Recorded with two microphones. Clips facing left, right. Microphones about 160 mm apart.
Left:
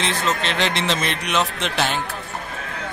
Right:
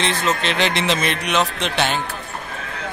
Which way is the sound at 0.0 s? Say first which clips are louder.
Right 2 dB; centre (ahead or behind).